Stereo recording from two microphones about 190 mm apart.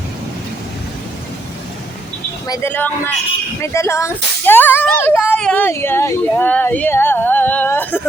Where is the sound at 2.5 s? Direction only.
10° left (ahead or behind).